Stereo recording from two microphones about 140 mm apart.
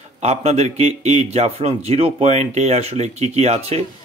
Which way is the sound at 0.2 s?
50° right (ahead or behind).